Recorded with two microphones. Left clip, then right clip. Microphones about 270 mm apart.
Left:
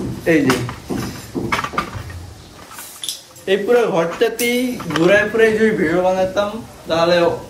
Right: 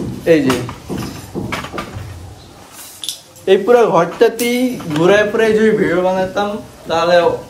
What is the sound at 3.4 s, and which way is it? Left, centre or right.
A man's voice, right.